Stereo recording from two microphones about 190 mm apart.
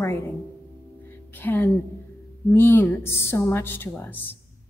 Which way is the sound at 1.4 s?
10° left (ahead or behind).